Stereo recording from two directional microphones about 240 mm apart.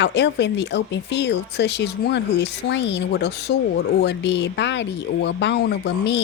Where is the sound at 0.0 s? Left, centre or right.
Left.